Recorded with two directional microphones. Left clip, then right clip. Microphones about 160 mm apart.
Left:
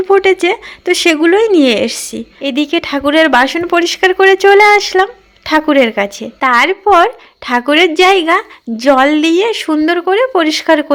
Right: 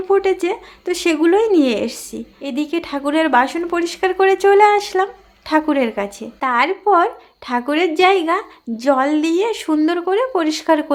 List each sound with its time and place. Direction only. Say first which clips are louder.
0.1 s a woman's voice: left 6 dB; 30° left (ahead or behind)